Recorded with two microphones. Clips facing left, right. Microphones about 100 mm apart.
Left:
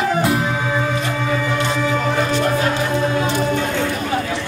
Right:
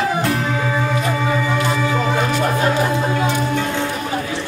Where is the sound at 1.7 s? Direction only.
10° right (ahead or behind).